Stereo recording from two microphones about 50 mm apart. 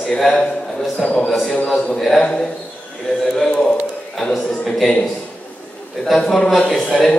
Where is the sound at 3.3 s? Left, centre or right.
Centre.